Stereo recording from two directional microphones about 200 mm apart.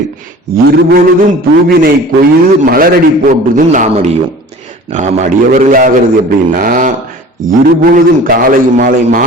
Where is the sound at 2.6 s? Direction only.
45° right (ahead or behind).